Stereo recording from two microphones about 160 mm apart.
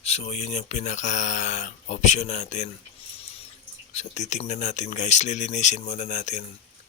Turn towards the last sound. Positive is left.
turn(degrees=45)  # may be behind; listen again after turning